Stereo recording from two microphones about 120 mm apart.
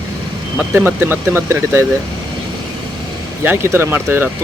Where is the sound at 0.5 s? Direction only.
15° right (ahead or behind).